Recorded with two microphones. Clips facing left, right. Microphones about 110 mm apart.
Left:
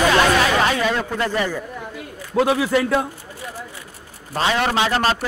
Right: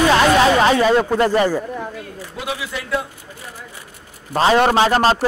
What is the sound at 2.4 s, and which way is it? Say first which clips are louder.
Speech: left 9 dB; 45° left (ahead or behind).